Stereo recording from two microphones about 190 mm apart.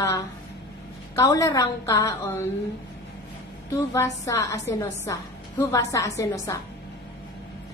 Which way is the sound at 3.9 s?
15° left (ahead or behind).